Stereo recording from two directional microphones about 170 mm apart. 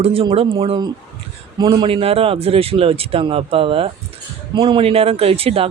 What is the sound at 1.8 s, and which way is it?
Speech, 35° right (ahead or behind).